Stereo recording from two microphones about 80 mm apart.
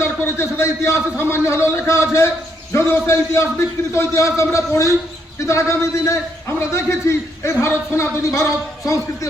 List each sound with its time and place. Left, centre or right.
0.0 s a man's voice: left